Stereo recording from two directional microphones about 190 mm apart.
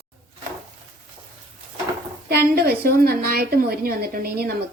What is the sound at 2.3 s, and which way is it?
A woman's voice, 55° right (ahead or behind).